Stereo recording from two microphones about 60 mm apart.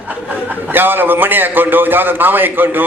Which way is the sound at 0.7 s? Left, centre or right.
Right.